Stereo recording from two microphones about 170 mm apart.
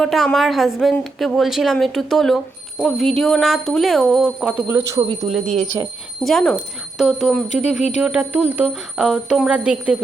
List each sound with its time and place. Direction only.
0.0 s speech: centre (ahead or behind)
4.8 s speech: 20° right (ahead or behind)
5.3 s speech: centre (ahead or behind)